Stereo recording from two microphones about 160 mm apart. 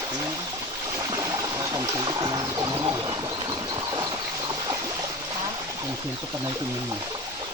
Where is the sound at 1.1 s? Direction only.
20° right (ahead or behind).